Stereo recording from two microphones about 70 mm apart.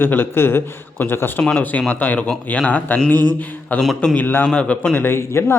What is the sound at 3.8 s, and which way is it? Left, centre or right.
Speech, centre.